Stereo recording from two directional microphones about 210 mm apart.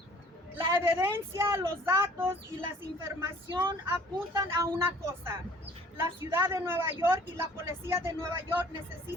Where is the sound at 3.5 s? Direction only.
20° right (ahead or behind).